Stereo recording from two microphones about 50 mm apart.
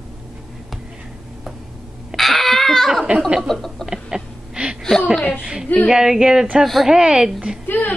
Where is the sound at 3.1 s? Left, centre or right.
Right.